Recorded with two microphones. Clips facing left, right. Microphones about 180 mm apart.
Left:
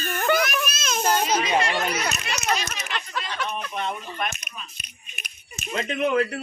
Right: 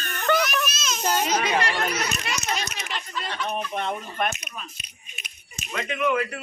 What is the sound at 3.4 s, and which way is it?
Speech, 50° right (ahead or behind).